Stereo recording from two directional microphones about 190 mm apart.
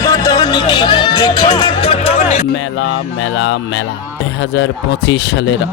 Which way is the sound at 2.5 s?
75° left (ahead or behind).